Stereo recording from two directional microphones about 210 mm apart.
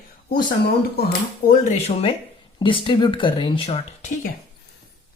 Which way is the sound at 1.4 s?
35° left (ahead or behind).